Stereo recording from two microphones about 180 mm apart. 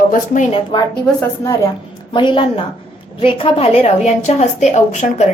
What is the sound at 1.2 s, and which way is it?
A woman's voice, 15° left (ahead or behind).